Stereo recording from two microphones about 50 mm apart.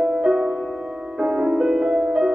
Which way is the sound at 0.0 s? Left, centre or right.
Centre.